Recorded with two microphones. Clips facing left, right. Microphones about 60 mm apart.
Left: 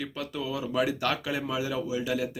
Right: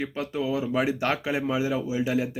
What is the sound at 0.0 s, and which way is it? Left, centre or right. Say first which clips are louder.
Speech: right 5 dB; right.